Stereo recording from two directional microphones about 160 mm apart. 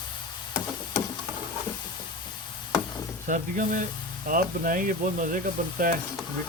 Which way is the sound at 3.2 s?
55° right (ahead or behind).